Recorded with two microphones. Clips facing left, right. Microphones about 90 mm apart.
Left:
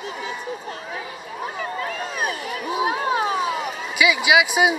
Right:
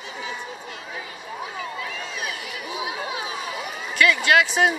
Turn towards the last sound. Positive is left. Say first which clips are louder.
# left 1 dB
turn(degrees=5)  # may be behind; listen again after turning